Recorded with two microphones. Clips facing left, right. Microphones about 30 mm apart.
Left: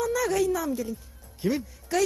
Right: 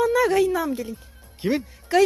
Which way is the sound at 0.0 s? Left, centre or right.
Right.